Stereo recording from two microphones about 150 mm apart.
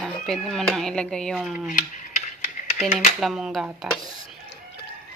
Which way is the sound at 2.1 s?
55° left (ahead or behind).